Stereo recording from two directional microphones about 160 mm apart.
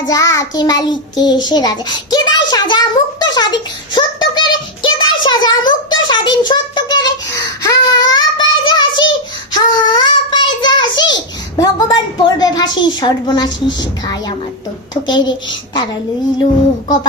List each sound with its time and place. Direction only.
0.1 s child singing: 20° left (ahead or behind)
12.4 s a woman's voice: 25° left (ahead or behind)